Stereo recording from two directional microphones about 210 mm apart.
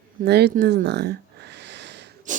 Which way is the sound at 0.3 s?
50° right (ahead or behind).